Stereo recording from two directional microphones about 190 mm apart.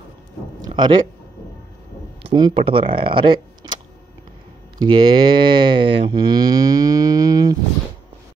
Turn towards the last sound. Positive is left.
turn(degrees=-20)  # may be behind; listen again after turning